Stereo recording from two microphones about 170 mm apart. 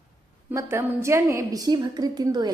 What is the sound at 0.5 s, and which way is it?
A woman's voice, 15° right (ahead or behind).